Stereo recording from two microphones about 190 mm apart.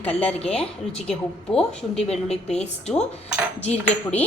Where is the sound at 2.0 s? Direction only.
35° left (ahead or behind).